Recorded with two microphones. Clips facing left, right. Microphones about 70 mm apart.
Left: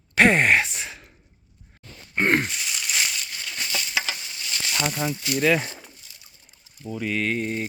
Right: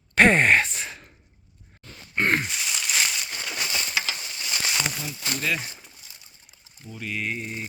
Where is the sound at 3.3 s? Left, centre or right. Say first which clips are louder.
Right 2 dB; right.